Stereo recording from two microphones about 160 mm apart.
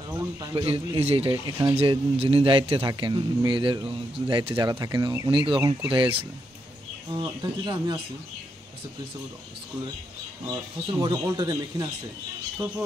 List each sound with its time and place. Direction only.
0.1 s speech: 25° right (ahead or behind)
0.7 s speech: 35° right (ahead or behind)
1.3 s speech: 20° right (ahead or behind)
1.8 s speech: 35° right (ahead or behind)
7.2 s speech: 30° right (ahead or behind)
10.5 s speech: 30° right (ahead or behind)